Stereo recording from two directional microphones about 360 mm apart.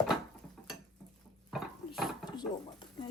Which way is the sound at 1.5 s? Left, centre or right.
Centre.